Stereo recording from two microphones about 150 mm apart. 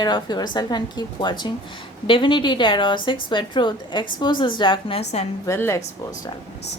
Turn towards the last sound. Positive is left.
turn(degrees=20)  # may be behind; listen again after turning